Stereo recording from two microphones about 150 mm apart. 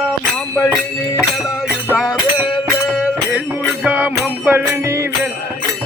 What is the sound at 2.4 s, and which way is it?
Music, 5° right (ahead or behind).